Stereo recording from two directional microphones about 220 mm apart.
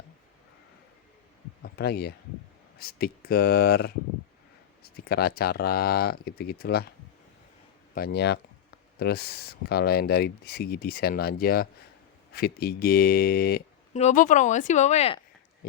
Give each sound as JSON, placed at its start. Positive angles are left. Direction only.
{"t": 1.6, "sound": "a sound", "side_deg": 45}
{"t": 2.7, "sound": "speech", "side_deg": 45}
{"t": 7.9, "sound": "speech", "side_deg": 45}
{"t": 13.9, "sound": "speech", "side_deg": 35}